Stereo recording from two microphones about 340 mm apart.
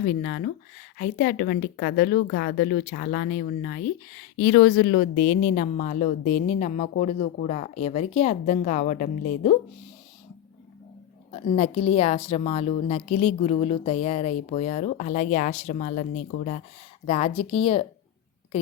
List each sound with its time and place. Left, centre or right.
0.2 s speech: left
11.5 s speech: centre